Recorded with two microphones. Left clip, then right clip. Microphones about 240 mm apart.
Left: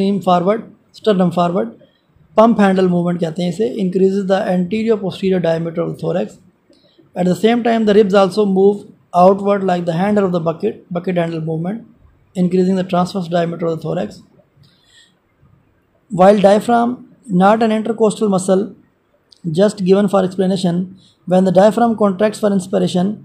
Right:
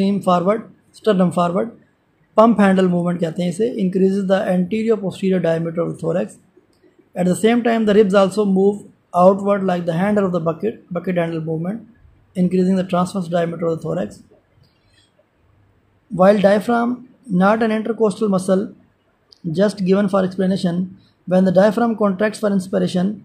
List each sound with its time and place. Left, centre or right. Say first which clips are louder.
0.0 s speech: left 3 dB; centre
16.2 s speech: left 3 dB; centre